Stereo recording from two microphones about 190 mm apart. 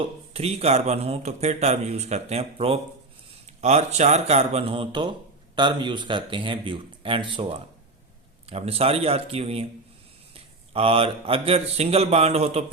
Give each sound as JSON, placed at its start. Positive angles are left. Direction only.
{"t": 0.0, "sound": "a man's voice", "side_deg": -35}